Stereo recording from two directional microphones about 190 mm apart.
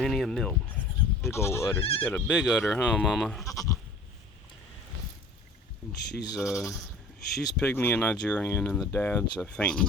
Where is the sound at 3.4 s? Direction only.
15° left (ahead or behind).